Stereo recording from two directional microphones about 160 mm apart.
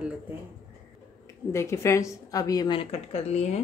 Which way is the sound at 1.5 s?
15° left (ahead or behind).